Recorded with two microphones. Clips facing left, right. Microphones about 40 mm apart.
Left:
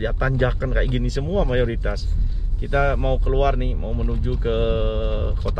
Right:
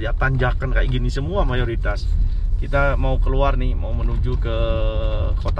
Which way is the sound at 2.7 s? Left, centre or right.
Right.